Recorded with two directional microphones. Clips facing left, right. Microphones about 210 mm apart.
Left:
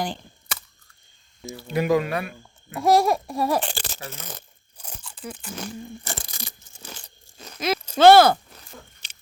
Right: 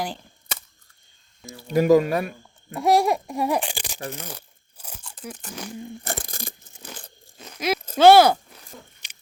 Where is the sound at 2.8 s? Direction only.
15° right (ahead or behind).